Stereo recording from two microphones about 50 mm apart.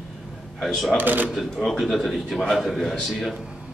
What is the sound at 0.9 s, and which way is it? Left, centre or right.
Speech, right.